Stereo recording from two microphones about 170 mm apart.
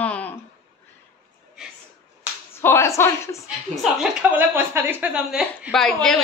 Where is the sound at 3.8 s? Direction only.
5° right (ahead or behind).